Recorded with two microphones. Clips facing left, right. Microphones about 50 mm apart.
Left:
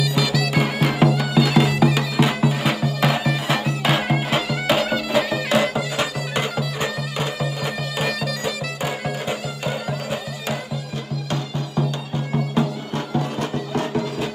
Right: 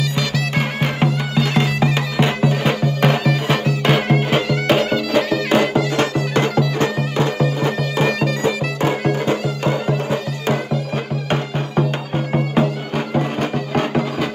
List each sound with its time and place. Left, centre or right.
0.0 s bagpipes: centre
7.6 s bagpipes: right
11.2 s music: right